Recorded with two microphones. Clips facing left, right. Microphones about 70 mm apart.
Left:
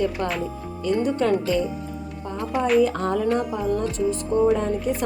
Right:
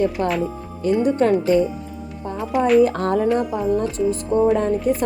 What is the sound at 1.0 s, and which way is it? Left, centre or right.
Speech, right.